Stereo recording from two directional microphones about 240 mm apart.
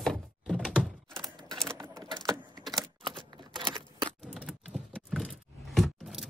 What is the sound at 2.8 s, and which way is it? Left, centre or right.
Typewriter, centre.